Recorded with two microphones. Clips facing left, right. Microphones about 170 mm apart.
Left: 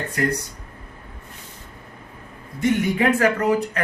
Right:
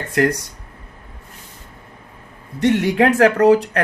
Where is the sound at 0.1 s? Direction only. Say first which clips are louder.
Right 7 dB; 90° right.